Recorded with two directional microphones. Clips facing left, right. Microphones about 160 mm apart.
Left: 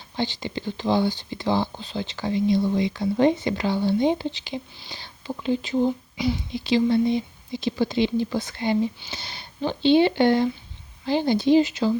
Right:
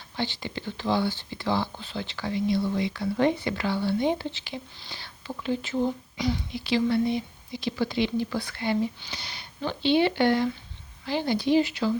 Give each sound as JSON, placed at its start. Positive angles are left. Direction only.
{"t": 0.2, "sound": "speech", "side_deg": 20}
{"t": 6.1, "sound": "speech", "side_deg": 10}
{"t": 6.5, "sound": "speech", "side_deg": 20}